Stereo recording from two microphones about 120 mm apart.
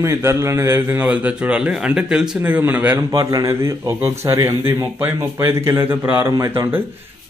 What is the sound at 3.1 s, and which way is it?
Speech, 30° right (ahead or behind).